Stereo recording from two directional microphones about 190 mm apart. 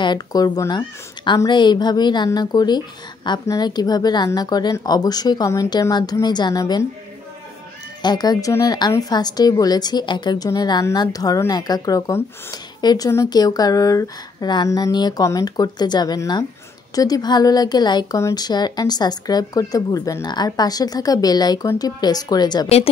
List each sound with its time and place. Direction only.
0.0 s a woman's voice: 20° left (ahead or behind)
8.0 s a woman's voice: 20° left (ahead or behind)